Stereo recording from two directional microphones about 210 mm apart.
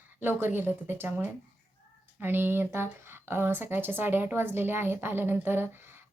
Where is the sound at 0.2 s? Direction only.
10° right (ahead or behind).